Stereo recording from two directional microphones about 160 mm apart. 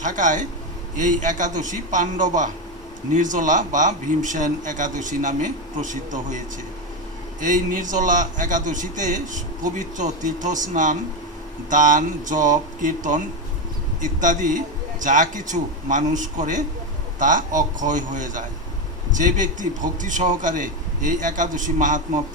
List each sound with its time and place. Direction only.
0.0 s a man's voice: 50° right (ahead or behind)
7.4 s a man's voice: 55° right (ahead or behind)